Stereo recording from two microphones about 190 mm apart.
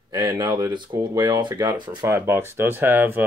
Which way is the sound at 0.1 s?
20° right (ahead or behind).